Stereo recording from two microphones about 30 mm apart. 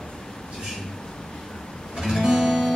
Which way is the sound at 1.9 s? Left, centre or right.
Centre.